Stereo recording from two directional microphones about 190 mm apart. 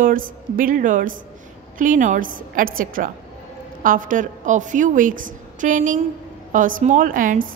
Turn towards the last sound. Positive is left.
turn(degrees=-45)  # may be behind; listen again after turning